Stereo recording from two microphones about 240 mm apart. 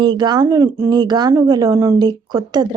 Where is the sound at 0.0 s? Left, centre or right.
Centre.